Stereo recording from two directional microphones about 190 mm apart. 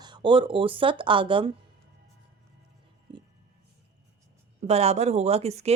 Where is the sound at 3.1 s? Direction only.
25° right (ahead or behind).